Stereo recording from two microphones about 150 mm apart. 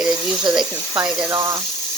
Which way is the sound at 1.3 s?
20° right (ahead or behind).